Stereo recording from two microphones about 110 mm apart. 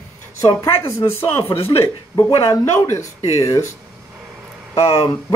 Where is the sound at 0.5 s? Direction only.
55° left (ahead or behind).